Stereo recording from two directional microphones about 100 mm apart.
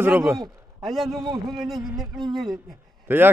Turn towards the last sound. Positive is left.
turn(degrees=-20)  # may be behind; listen again after turning